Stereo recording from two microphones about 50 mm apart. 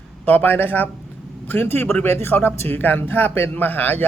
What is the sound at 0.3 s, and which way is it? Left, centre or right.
A man's voice, left.